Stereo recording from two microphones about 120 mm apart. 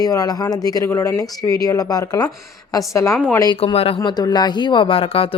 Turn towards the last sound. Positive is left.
turn(degrees=50)  # may be behind; listen again after turning